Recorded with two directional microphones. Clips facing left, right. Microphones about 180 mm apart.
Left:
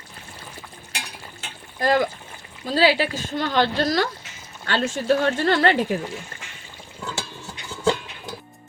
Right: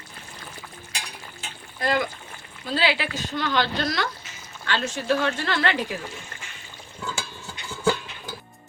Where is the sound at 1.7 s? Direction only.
40° left (ahead or behind).